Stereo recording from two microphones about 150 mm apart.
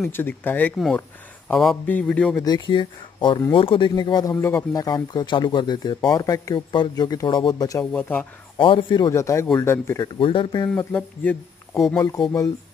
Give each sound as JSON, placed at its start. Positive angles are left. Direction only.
{"t": 0.1, "sound": "speech", "side_deg": 15}
{"t": 0.7, "sound": "speech", "side_deg": 0}
{"t": 2.3, "sound": "speech", "side_deg": 30}
{"t": 7.8, "sound": "speech", "side_deg": 10}
{"t": 8.5, "sound": "speech", "side_deg": 35}
{"t": 10.1, "sound": "speech", "side_deg": 35}
{"t": 10.9, "sound": "speech", "side_deg": 10}